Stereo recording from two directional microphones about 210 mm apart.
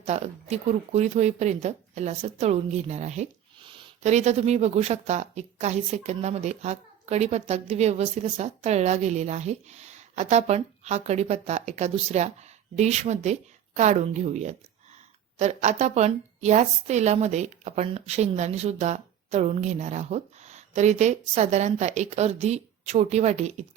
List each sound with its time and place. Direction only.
0.0 s speech: 30° right (ahead or behind)